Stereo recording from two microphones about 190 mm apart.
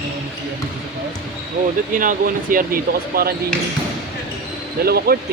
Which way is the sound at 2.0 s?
45° right (ahead or behind).